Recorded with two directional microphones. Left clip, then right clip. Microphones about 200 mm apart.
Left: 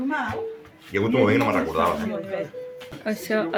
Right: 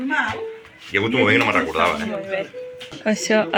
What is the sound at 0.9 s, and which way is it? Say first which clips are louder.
Speech: right 3 dB; 10° left (ahead or behind).